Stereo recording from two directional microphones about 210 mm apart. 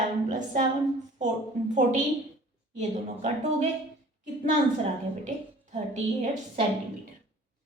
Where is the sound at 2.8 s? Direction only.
35° right (ahead or behind).